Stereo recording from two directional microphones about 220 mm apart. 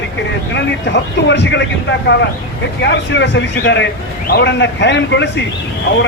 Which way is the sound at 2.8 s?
55° left (ahead or behind).